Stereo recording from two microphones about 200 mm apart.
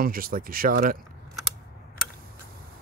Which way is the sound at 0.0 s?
45° right (ahead or behind).